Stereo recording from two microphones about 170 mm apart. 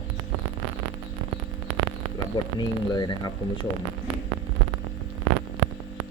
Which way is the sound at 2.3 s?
25° left (ahead or behind).